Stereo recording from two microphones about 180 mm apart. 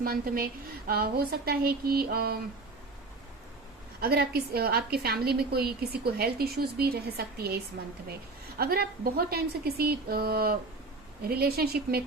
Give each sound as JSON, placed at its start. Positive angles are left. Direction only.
{"t": 0.0, "sound": "a woman's voice", "side_deg": -55}
{"t": 4.0, "sound": "a woman's voice", "side_deg": -60}